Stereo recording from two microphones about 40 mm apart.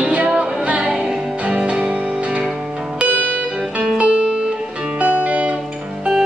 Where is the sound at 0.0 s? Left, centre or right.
Right.